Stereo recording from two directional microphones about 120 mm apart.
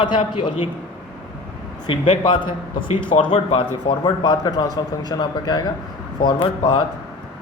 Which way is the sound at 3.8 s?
35° left (ahead or behind).